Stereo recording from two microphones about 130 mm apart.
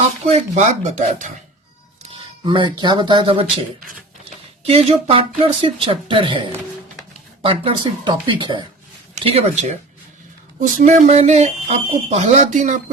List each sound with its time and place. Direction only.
0.3 s speech: 65° right (ahead or behind)
2.4 s speech: 40° right (ahead or behind)
4.6 s speech: 50° right (ahead or behind)
7.4 s speech: 40° right (ahead or behind)
9.2 s speech: 50° right (ahead or behind)
10.8 s speech: 65° right (ahead or behind)